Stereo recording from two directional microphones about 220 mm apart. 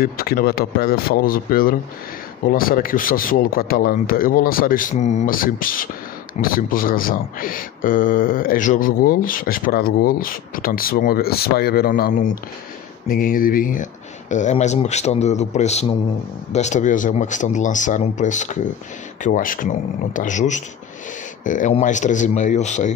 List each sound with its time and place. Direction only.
0.0 s speech: 40° left (ahead or behind)